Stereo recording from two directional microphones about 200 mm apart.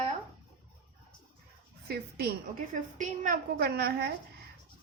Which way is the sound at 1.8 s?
50° right (ahead or behind).